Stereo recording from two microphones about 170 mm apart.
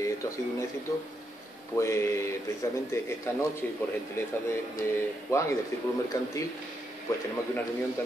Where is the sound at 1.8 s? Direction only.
15° left (ahead or behind).